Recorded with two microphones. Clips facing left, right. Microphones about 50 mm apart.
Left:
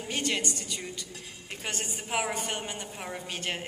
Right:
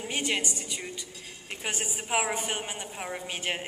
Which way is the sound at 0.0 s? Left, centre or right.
Centre.